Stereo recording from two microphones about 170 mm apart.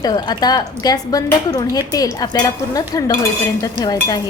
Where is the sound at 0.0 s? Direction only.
25° left (ahead or behind).